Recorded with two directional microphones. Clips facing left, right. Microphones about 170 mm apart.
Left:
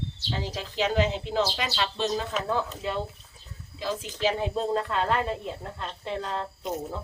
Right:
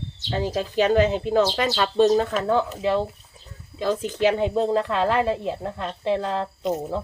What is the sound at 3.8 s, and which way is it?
A woman's voice, 55° right (ahead or behind).